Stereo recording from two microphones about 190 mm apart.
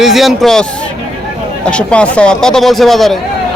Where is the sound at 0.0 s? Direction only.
Centre (ahead or behind).